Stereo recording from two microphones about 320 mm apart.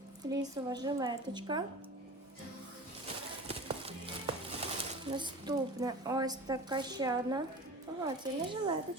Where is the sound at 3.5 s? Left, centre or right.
Centre.